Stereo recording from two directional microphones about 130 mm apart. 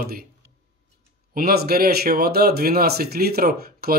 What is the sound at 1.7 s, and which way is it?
Speech, 90° right.